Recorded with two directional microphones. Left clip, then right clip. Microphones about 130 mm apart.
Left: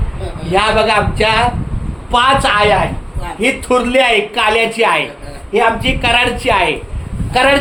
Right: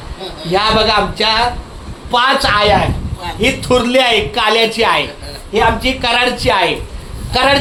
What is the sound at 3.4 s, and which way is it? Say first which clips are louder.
A woman's voice: even; 15° right (ahead or behind).